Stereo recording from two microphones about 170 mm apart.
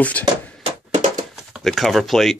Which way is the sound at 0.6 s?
45° right (ahead or behind).